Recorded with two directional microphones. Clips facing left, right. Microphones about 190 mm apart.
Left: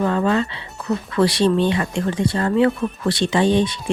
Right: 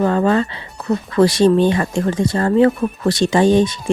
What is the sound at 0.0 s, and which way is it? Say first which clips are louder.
Speech: right 3 dB; 40° right (ahead or behind).